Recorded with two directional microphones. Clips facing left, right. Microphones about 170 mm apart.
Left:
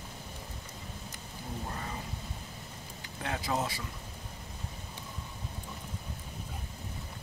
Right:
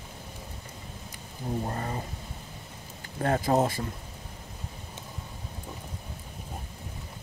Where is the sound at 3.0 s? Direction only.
45° right (ahead or behind).